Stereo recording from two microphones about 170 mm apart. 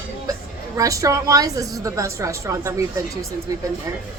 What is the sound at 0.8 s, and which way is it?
A woman's voice, 20° right (ahead or behind).